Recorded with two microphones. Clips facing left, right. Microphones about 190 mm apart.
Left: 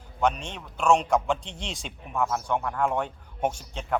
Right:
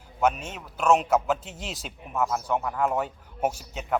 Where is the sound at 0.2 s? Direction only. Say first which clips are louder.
Right 1 dB; 5° right (ahead or behind).